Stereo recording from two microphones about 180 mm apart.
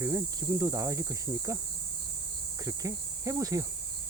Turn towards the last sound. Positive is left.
turn(degrees=-20)  # may be behind; listen again after turning